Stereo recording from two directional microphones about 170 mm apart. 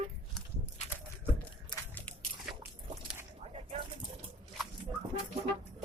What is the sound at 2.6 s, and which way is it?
Dog, 15° right (ahead or behind).